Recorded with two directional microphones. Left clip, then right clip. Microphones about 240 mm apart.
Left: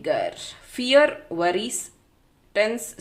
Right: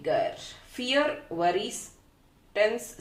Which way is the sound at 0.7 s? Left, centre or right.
Left.